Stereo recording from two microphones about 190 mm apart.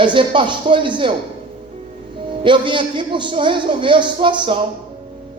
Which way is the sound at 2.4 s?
25° right (ahead or behind).